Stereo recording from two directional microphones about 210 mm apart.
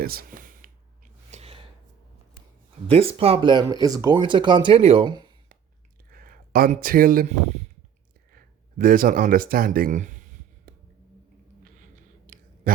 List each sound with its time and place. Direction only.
0.0 s a sound: 45° right (ahead or behind)
1.3 s gasp: 30° right (ahead or behind)
2.8 s speech: 25° right (ahead or behind)
6.1 s speech: 45° right (ahead or behind)
8.8 s speech: 40° right (ahead or behind)
10.7 s finger snapping: 45° right (ahead or behind)
12.2 s clicking: 45° right (ahead or behind)